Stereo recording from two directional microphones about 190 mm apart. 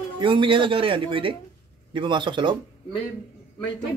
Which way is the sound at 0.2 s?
25° right (ahead or behind).